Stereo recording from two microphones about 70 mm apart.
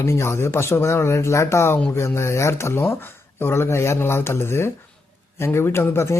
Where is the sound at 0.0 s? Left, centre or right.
Left.